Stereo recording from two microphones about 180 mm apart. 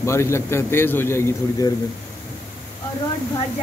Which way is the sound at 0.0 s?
15° left (ahead or behind).